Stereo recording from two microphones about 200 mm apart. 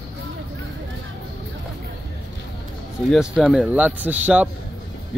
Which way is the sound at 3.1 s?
5° right (ahead or behind).